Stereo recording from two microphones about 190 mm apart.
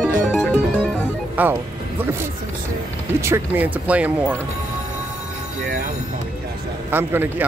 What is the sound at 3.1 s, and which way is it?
Speech, 10° right (ahead or behind).